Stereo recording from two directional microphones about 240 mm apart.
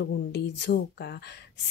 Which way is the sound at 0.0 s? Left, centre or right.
Left.